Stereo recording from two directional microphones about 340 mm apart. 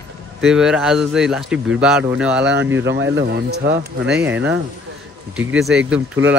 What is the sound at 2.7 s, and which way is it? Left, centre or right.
Speech, right.